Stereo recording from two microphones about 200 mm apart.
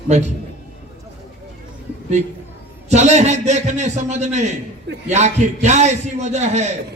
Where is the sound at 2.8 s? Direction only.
35° right (ahead or behind).